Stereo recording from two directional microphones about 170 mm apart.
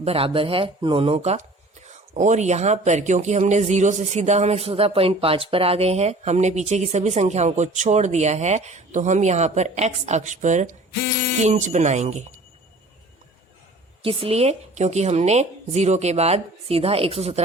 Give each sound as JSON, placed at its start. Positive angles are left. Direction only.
{"t": 0.0, "sound": "speech", "side_deg": -35}
{"t": 14.0, "sound": "speech", "side_deg": -30}